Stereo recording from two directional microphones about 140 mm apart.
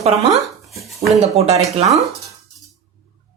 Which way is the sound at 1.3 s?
50° right (ahead or behind).